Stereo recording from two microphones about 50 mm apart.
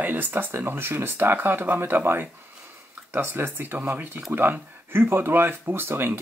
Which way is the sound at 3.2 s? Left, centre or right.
Right.